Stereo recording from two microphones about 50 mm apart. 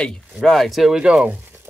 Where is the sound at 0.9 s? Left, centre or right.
Centre.